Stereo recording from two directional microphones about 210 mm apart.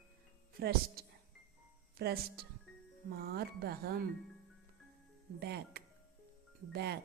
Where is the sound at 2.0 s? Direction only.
50° right (ahead or behind).